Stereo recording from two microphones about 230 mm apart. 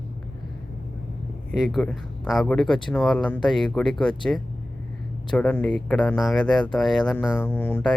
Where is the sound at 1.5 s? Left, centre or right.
Centre.